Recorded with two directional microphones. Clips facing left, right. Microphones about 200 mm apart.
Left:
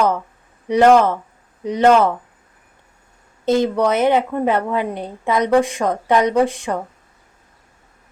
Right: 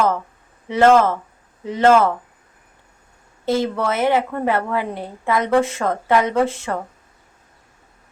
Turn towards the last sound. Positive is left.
turn(degrees=15)  # may be behind; listen again after turning